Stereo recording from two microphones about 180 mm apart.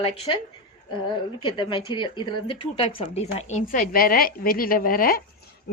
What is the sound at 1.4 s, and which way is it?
A woman's voice, 25° left (ahead or behind).